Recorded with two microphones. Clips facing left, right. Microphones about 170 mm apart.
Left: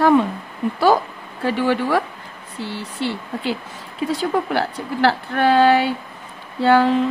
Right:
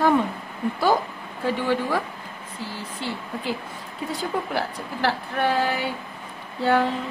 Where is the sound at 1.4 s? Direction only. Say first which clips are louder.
Left 4 dB; 80° left.